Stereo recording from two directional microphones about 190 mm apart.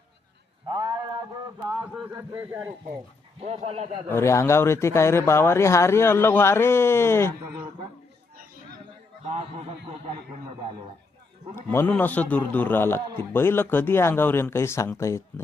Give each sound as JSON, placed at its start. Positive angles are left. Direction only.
{"t": 0.7, "sound": "a sound", "side_deg": -20}
{"t": 1.6, "sound": "a man's voice", "side_deg": -10}
{"t": 3.4, "sound": "speech", "side_deg": -35}
{"t": 4.1, "sound": "speech", "side_deg": 15}
{"t": 9.2, "sound": "speech", "side_deg": -30}
{"t": 11.5, "sound": "speech", "side_deg": 15}